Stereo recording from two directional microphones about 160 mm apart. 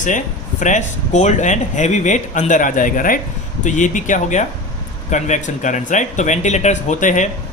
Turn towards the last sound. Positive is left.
turn(degrees=50)  # may be behind; listen again after turning